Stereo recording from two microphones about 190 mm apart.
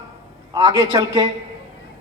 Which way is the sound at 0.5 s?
20° right (ahead or behind).